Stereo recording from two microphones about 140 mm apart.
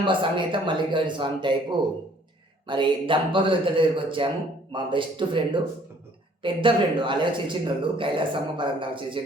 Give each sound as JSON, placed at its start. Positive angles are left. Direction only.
{"t": 0.0, "sound": "speech", "side_deg": -35}